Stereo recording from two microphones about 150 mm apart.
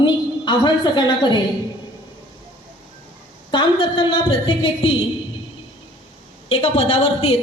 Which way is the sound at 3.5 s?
35° left (ahead or behind).